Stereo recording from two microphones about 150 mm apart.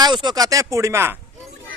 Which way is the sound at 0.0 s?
30° right (ahead or behind).